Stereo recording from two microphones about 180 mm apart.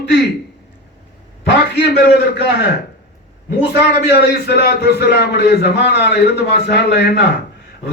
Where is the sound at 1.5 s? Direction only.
70° left (ahead or behind).